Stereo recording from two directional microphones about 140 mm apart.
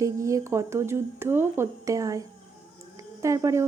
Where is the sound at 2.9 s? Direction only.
25° right (ahead or behind).